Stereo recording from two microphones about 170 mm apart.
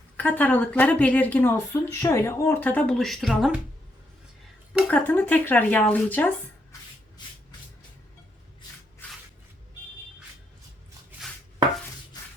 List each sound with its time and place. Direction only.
0.2 s speech: 10° left (ahead or behind)
4.9 s speech: 10° left (ahead or behind)
9.0 s a sound: 10° left (ahead or behind)
11.2 s chopping: centre (ahead or behind)